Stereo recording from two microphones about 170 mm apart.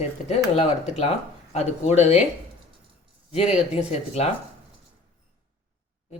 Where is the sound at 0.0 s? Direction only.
35° left (ahead or behind).